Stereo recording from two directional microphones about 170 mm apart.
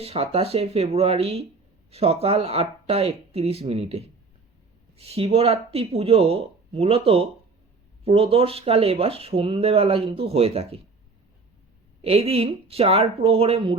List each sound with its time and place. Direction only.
0.0 s speech: 35° right (ahead or behind)
12.0 s speech: 35° right (ahead or behind)